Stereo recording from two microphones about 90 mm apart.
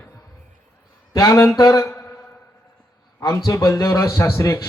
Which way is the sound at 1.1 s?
40° left (ahead or behind).